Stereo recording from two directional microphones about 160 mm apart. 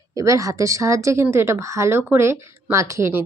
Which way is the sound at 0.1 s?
20° right (ahead or behind).